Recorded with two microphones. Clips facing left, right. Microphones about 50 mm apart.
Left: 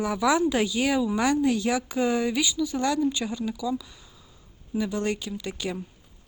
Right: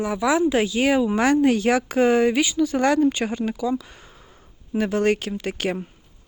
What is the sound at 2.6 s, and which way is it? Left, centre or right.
Speech, right.